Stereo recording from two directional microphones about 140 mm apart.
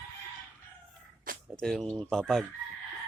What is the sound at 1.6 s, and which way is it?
Crowing, 5° left (ahead or behind).